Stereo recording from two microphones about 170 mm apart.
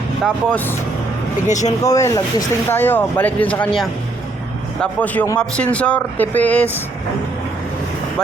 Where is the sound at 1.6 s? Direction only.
20° left (ahead or behind).